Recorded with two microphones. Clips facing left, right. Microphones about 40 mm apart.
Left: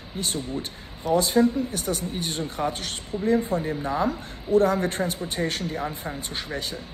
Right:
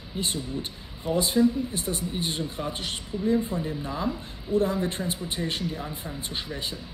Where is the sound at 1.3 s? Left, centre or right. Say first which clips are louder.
Left 2 dB; left.